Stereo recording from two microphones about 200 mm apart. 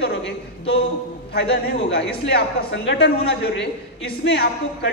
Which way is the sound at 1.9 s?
55° left (ahead or behind).